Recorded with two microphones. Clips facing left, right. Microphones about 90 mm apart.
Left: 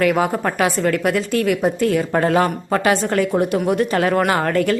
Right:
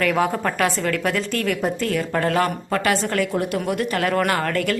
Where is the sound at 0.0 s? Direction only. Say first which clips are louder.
Left 3 dB; 10° left (ahead or behind); by 4.1 s 25° left (ahead or behind).